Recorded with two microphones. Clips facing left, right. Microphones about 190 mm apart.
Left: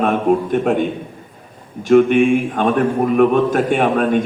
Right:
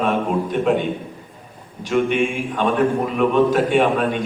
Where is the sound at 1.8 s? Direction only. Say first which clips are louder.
Left 8 dB; 50° left (ahead or behind).